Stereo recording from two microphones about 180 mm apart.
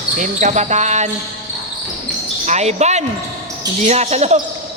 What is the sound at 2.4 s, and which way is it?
Basketball bounce, 40° right (ahead or behind).